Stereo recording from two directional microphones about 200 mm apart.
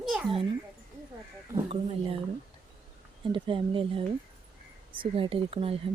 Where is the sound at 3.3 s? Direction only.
25° right (ahead or behind).